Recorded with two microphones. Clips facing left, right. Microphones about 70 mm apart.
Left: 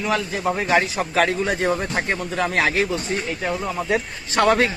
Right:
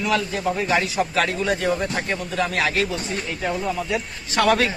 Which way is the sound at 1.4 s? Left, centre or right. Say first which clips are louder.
Even; left.